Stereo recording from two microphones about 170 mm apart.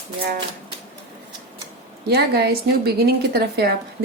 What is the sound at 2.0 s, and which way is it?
A woman's voice, 70° right (ahead or behind).